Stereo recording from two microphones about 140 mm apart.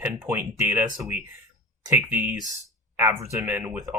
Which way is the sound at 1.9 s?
15° right (ahead or behind).